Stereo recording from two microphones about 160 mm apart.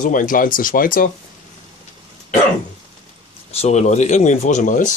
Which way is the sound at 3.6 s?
45° left (ahead or behind).